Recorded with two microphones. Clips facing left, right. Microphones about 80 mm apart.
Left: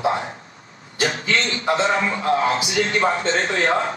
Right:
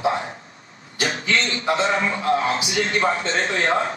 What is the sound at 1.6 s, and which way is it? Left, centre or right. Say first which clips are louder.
A man's voice: left 2 dB; left.